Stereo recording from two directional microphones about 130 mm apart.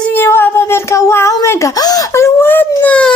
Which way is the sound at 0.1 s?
15° left (ahead or behind).